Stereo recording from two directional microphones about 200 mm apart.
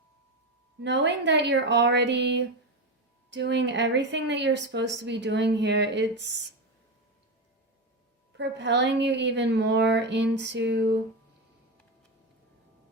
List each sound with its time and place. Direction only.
0.8 s speech: 60° right (ahead or behind)
8.4 s speech: 60° right (ahead or behind)